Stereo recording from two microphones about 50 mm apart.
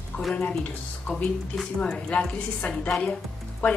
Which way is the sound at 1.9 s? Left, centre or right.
Left.